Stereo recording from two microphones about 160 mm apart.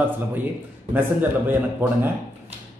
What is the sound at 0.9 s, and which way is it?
A man's voice, 15° right (ahead or behind).